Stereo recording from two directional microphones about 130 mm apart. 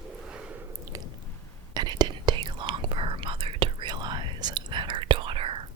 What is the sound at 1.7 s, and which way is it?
Whispering, 30° right (ahead or behind).